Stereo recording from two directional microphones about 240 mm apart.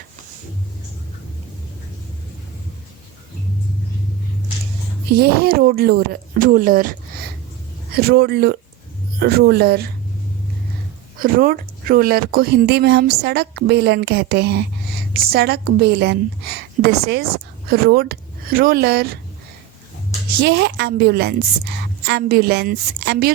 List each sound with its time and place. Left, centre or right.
5.1 s a woman's voice: right
7.9 s a woman's voice: right
11.2 s a woman's voice: right
20.4 s a woman's voice: right